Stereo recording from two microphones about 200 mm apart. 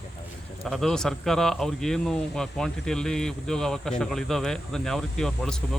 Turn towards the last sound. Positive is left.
turn(degrees=5)  # may be behind; listen again after turning